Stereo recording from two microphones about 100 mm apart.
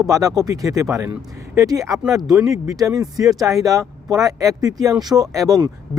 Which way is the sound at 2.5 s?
35° right (ahead or behind).